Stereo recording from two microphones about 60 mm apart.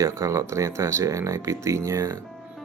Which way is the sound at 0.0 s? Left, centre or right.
Right.